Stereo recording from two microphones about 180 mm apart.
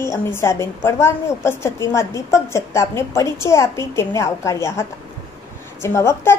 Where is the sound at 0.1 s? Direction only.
15° left (ahead or behind).